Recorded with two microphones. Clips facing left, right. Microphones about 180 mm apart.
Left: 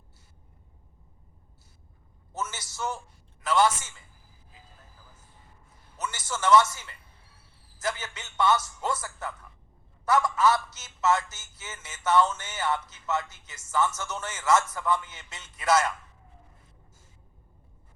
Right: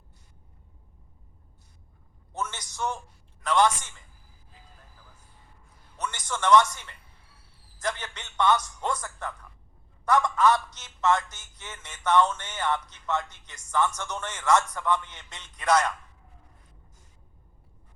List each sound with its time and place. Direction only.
2.3 s a sound: 5° left (ahead or behind)
3.4 s speech: 5° left (ahead or behind)
6.0 s speech: 5° left (ahead or behind)